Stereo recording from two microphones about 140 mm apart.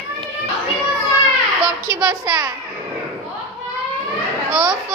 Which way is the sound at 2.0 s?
20° right (ahead or behind).